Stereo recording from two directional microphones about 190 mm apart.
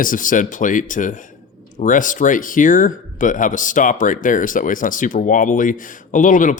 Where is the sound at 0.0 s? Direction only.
45° left (ahead or behind).